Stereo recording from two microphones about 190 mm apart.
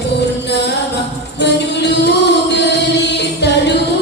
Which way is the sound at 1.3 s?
65° left (ahead or behind).